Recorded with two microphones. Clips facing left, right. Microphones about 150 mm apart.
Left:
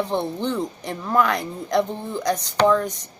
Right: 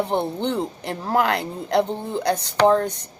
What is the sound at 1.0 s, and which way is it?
Speech, 80° right.